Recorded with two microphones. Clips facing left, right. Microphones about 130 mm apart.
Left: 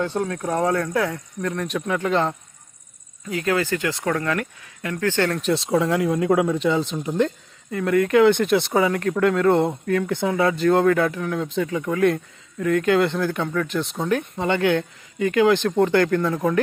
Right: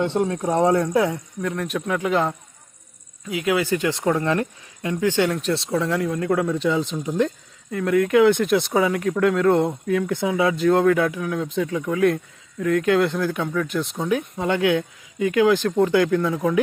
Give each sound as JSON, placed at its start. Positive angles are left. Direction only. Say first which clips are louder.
{"t": 0.0, "sound": "speech", "louder": "right 3 dB", "side_deg": -25}
{"t": 1.4, "sound": "speech", "louder": "left 1 dB", "side_deg": -5}
{"t": 5.3, "sound": "speech", "louder": "left 1 dB", "side_deg": 0}
{"t": 5.8, "sound": "speech", "louder": "left 2 dB", "side_deg": 10}